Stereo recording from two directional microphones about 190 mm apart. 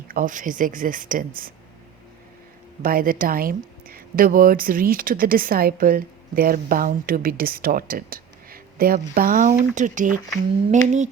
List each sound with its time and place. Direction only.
0.1 s speech: 45° right (ahead or behind)
2.8 s speech: 50° right (ahead or behind)
10.3 s a sound: 40° right (ahead or behind)